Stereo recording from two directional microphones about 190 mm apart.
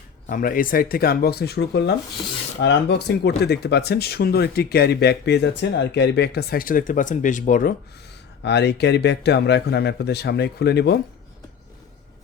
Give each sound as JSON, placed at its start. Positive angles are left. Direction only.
{"t": 0.3, "sound": "speech", "side_deg": 45}
{"t": 8.4, "sound": "speech", "side_deg": 65}